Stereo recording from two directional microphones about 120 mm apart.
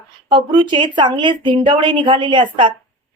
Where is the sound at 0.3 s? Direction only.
45° right (ahead or behind).